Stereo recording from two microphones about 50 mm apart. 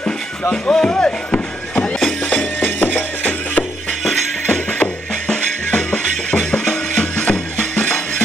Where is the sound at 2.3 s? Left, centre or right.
Left.